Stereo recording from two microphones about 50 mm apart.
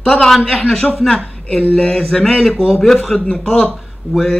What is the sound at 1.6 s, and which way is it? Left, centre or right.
Speech, left.